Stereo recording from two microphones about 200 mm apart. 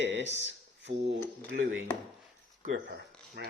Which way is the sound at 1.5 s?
65° right (ahead or behind).